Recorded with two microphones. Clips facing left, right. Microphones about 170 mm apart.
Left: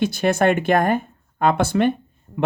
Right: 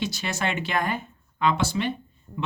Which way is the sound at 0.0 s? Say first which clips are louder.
Left 11 dB; 55° left (ahead or behind).